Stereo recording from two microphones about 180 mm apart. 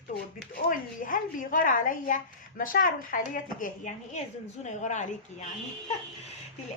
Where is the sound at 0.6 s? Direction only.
50° left (ahead or behind).